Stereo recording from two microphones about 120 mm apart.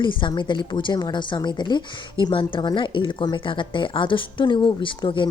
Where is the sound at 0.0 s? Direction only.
40° left (ahead or behind).